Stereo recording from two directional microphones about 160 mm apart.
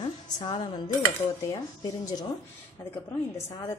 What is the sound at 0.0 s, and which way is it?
Music, 30° left (ahead or behind).